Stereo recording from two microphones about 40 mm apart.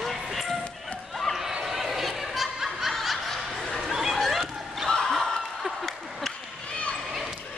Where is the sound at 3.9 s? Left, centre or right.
Centre.